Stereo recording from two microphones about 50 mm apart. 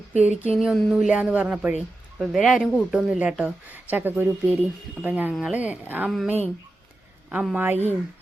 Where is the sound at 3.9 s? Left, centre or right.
Right.